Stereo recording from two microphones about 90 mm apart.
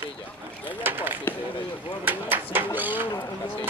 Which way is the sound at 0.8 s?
20° right (ahead or behind).